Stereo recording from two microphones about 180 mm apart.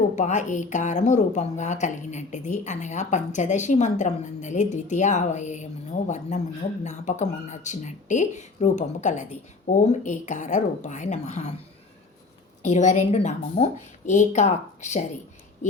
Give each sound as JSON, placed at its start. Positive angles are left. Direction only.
{"t": 0.2, "sound": "a woman's voice", "side_deg": 40}
{"t": 12.6, "sound": "a woman's voice", "side_deg": 40}